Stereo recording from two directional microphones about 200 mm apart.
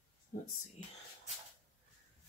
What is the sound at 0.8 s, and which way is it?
Whispering, 35° left (ahead or behind).